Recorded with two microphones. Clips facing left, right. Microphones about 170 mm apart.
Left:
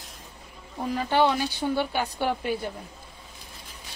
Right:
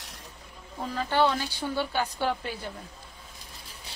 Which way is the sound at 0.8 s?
15° left (ahead or behind).